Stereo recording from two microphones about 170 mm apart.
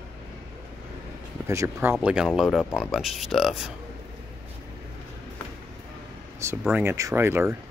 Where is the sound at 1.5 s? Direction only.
15° right (ahead or behind).